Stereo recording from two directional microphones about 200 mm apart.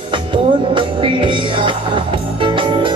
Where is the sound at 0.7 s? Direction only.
25° right (ahead or behind).